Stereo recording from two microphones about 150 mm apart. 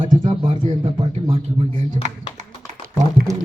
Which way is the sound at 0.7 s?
35° right (ahead or behind).